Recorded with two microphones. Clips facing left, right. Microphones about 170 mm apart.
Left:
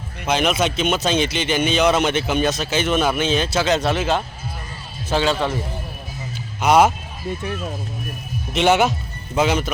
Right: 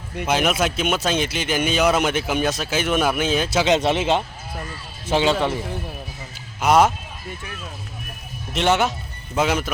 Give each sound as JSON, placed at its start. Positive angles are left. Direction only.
{"t": 0.2, "sound": "speech", "side_deg": -10}
{"t": 6.6, "sound": "speech", "side_deg": 0}
{"t": 8.5, "sound": "speech", "side_deg": 5}